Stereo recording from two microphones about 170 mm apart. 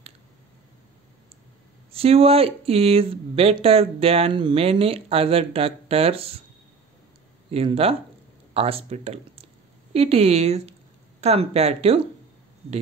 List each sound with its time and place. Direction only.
1.9 s speech: 35° right (ahead or behind)
7.5 s speech: 35° right (ahead or behind)